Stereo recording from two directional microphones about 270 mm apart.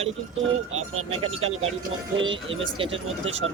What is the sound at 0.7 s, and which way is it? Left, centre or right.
Speech, right.